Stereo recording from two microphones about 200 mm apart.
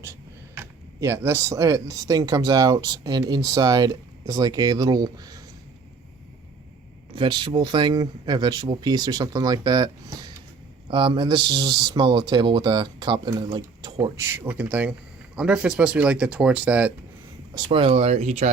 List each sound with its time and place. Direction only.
0.0 s a sound: 10° right (ahead or behind)
1.0 s speech: 15° right (ahead or behind)
7.2 s speech: 20° right (ahead or behind); by 16.9 s 5° right (ahead or behind)
17.5 s speech: 25° right (ahead or behind)